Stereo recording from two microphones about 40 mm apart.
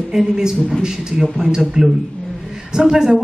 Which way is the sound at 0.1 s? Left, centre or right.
Centre.